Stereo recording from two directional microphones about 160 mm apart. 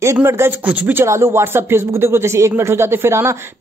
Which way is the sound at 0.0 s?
15° right (ahead or behind).